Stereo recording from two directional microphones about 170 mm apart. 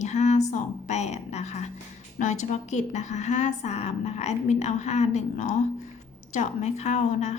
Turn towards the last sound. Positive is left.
turn(degrees=45)  # may be behind; listen again after turning